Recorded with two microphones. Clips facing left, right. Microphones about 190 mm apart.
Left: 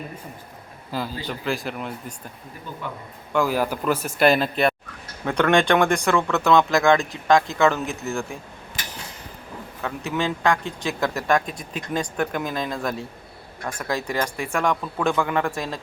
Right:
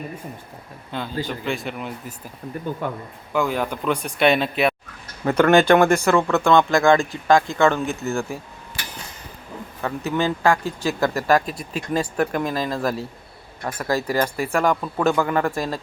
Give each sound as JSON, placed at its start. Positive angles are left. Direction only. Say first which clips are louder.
{"t": 0.9, "sound": "speech", "louder": "right 1 dB", "side_deg": 5}
{"t": 2.8, "sound": "a man's voice", "louder": "right 4 dB", "side_deg": -50}
{"t": 3.3, "sound": "speech", "louder": "left 1 dB", "side_deg": 5}
{"t": 9.8, "sound": "speech", "louder": "right 3 dB", "side_deg": 0}